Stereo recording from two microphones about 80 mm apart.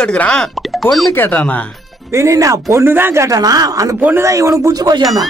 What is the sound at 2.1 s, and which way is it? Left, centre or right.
Speech, right.